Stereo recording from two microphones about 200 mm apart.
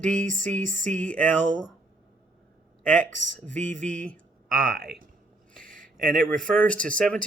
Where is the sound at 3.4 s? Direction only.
35° right (ahead or behind).